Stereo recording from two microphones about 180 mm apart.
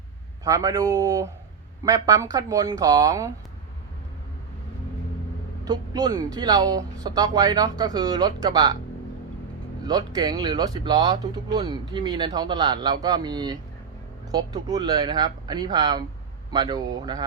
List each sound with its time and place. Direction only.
0.4 s speech: 20° right (ahead or behind)
5.6 s speech: 20° right (ahead or behind)
9.8 s speech: 20° right (ahead or behind)